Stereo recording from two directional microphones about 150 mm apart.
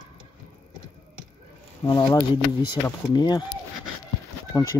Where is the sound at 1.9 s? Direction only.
25° left (ahead or behind).